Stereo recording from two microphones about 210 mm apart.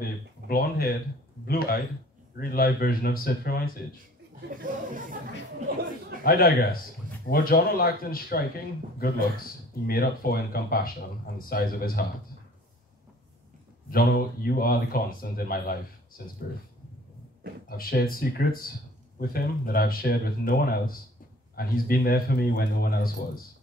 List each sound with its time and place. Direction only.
0.0 s speech: 45° left (ahead or behind)
4.5 s speech: 40° right (ahead or behind)
5.7 s chatter: 45° right (ahead or behind)
6.2 s speech: 45° left (ahead or behind)
13.8 s speech: 45° left (ahead or behind)
17.6 s speech: 45° left (ahead or behind)